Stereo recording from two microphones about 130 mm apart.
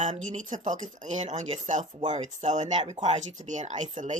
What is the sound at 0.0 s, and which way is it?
Speech, 75° right (ahead or behind).